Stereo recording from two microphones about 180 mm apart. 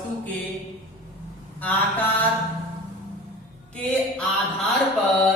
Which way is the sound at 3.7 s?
5° left (ahead or behind).